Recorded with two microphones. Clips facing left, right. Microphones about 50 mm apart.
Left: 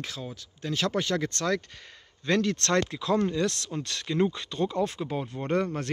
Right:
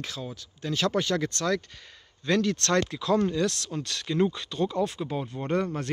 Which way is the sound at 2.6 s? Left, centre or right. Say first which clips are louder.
Right 1 dB; left.